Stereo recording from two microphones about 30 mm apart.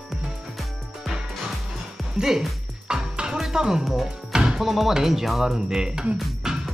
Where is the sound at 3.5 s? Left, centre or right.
Centre.